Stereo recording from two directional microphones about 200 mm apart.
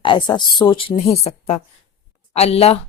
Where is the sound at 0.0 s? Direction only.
25° left (ahead or behind).